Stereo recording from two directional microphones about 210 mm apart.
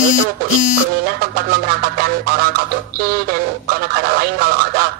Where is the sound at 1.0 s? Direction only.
45° right (ahead or behind).